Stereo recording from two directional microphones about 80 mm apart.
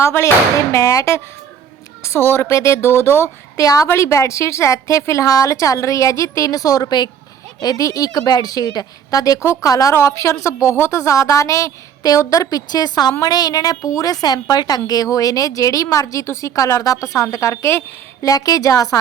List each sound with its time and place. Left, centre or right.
0.0 s a woman's voice: left
3.6 s a woman's voice: left
9.4 s a woman's voice: left
18.2 s a woman's voice: left